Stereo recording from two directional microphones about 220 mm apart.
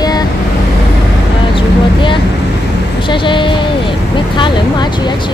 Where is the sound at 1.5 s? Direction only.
20° left (ahead or behind).